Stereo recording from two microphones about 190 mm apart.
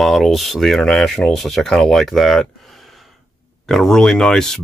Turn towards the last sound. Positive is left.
turn(degrees=0)  # may be behind; listen again after turning